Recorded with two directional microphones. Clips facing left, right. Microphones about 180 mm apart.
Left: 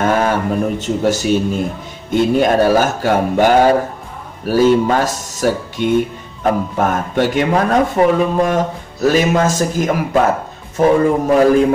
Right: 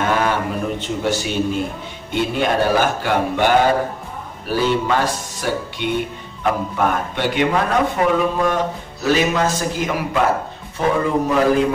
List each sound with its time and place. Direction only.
0.0 s speech: 45° left (ahead or behind)